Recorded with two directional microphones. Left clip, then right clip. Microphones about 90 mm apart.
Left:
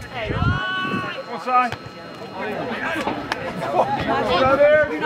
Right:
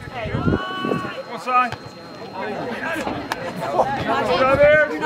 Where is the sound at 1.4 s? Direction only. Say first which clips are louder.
Even; 30° right (ahead or behind).